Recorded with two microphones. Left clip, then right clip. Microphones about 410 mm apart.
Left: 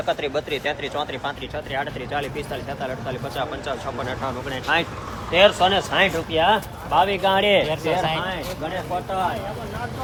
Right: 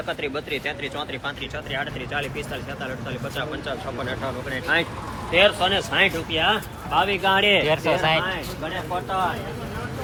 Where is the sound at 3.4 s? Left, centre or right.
Left.